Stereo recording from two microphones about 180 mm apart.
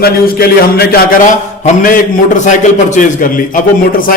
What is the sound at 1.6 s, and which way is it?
A man's voice, 45° left (ahead or behind).